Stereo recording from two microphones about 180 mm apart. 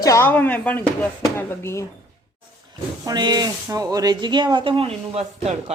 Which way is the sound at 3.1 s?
20° right (ahead or behind).